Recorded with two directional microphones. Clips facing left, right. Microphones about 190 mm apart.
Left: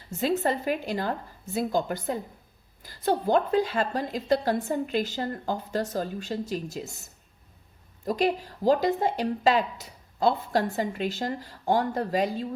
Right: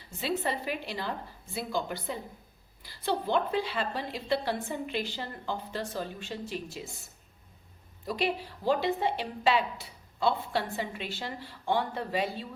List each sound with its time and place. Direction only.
0.1 s speech: 45° left (ahead or behind)